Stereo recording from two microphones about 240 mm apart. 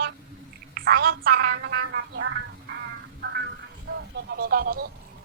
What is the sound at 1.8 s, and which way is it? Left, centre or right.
Music, right.